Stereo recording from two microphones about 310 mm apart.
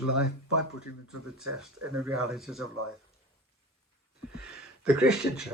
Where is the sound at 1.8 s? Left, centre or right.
Right.